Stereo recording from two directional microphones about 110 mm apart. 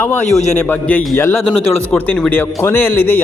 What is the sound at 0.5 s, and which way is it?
Speech, 15° left (ahead or behind).